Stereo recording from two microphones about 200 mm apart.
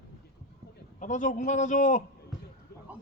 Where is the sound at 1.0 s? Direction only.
40° left (ahead or behind).